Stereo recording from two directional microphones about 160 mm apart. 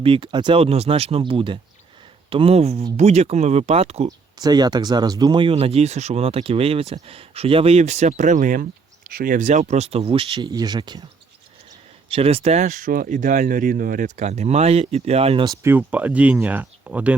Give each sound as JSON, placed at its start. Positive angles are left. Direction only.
{"t": 0.0, "sound": "speech", "side_deg": -30}
{"t": 4.4, "sound": "speech", "side_deg": -25}
{"t": 12.0, "sound": "speech", "side_deg": -35}
{"t": 12.6, "sound": "speech", "side_deg": -65}
{"t": 15.4, "sound": "speech", "side_deg": -15}